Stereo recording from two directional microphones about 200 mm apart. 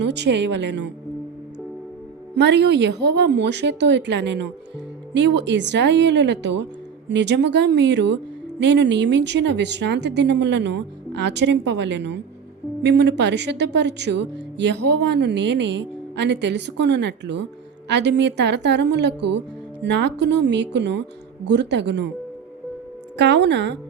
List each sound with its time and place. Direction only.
0.0 s speech: 60° right (ahead or behind)
2.3 s speech: 55° right (ahead or behind)
23.1 s speech: 60° right (ahead or behind)